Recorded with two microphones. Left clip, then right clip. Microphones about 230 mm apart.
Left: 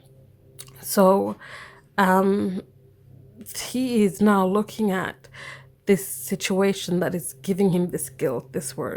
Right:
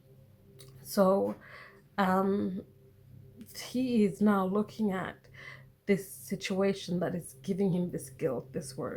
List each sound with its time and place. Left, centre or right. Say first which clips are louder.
0.6 s speech: left 9 dB; left